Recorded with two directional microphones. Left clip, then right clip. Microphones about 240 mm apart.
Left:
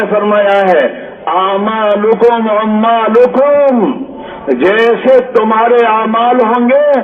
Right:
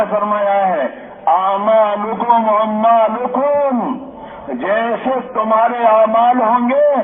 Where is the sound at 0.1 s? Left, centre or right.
Left.